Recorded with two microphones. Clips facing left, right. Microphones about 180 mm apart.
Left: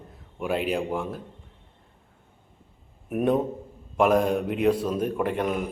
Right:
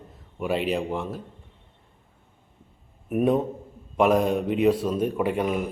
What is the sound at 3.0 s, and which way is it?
A man's voice, centre (ahead or behind).